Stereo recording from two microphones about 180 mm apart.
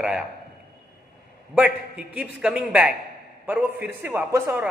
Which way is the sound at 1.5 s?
5° right (ahead or behind).